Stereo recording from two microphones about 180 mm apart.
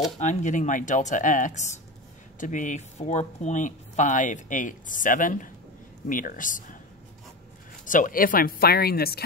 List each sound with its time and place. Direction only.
0.2 s speech: 40° left (ahead or behind)
7.8 s speech: 45° left (ahead or behind)